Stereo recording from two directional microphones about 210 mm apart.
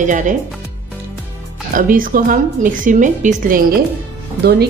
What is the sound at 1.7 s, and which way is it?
A woman's voice, 40° right (ahead or behind).